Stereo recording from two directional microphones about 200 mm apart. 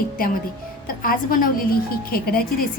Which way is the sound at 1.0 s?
45° left (ahead or behind).